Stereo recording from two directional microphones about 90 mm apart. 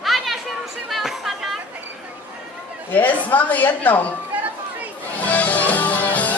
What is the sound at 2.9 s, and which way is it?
A woman's voice, 20° left (ahead or behind).